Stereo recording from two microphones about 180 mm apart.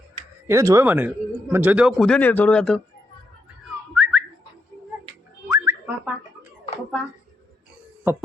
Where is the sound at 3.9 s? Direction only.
5° right (ahead or behind).